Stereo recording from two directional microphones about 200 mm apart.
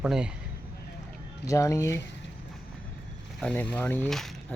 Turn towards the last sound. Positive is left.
turn(degrees=0)  # may be behind; listen again after turning